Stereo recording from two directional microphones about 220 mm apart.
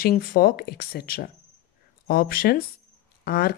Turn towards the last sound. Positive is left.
turn(degrees=45)  # may be behind; listen again after turning